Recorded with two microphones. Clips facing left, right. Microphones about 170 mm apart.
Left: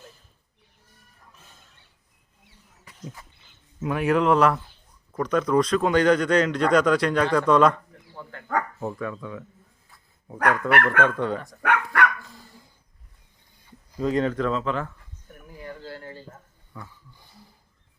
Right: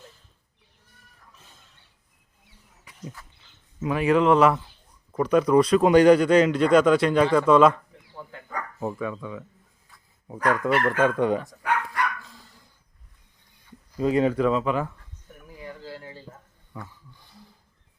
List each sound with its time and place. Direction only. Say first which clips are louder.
3.8 s speech: right 1 dB; centre (ahead or behind)
10.7 s speech: left 1 dB; 65° left (ahead or behind)
11.0 s speech: right 3 dB; 15° right (ahead or behind)
11.6 s dog: left 3 dB; 65° left (ahead or behind)
13.9 s speech: right 2 dB; 10° right (ahead or behind)
15.6 s a sound: left 1 dB; 5° right (ahead or behind)
16.7 s speech: right 2 dB; 15° right (ahead or behind)